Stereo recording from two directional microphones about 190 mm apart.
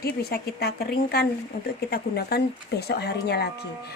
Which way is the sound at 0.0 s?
55° left (ahead or behind).